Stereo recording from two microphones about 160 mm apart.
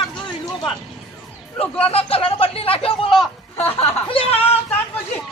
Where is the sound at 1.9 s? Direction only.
35° left (ahead or behind).